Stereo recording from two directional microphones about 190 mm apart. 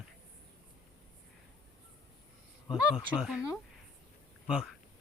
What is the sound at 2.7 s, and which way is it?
Speech, centre (ahead or behind).